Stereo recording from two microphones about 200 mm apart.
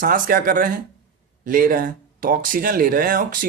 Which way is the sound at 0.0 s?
45° right (ahead or behind).